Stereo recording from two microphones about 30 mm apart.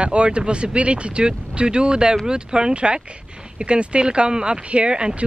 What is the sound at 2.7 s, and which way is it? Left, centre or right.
Speech, right.